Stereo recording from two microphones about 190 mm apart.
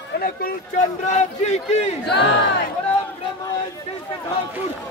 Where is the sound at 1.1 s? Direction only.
35° left (ahead or behind).